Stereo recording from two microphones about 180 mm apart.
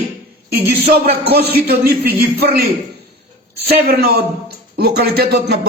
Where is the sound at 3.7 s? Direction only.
55° right (ahead or behind).